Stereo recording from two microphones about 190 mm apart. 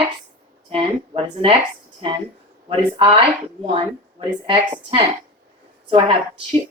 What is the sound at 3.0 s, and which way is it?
Speech, 30° right (ahead or behind).